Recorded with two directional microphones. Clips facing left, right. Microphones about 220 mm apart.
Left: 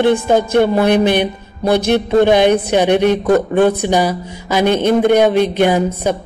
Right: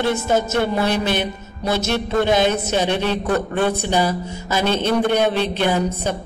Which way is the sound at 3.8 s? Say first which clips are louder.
Left 4 dB; 15° left (ahead or behind).